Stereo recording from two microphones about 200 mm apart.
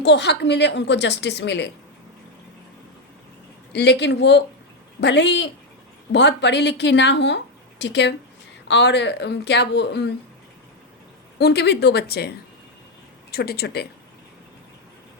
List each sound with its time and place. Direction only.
0.0 s a woman's voice: 60° left (ahead or behind)
3.7 s a woman's voice: 55° left (ahead or behind)
11.3 s a woman's voice: 55° left (ahead or behind)
13.3 s speech: 50° left (ahead or behind)